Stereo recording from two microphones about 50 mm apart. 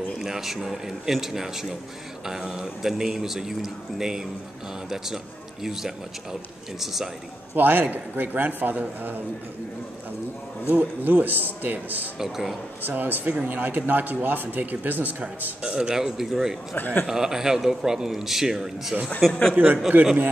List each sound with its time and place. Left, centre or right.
0.2 s a man's voice: centre
7.5 s speech: right
10.7 s speech: right
12.2 s a man's voice: centre
12.8 s speech: right
15.6 s a man's voice: centre
16.7 s a man's voice: left
17.0 s a man's voice: centre
19.2 s speech: centre
19.5 s speech: right